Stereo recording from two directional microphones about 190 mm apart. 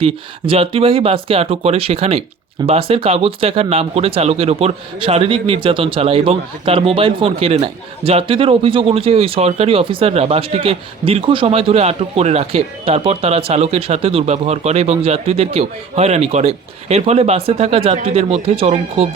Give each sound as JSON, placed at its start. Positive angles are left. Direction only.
{"t": 0.0, "sound": "speech", "side_deg": -30}